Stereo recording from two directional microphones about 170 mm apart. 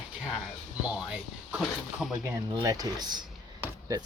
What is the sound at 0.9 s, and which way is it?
Speech, 5° right (ahead or behind).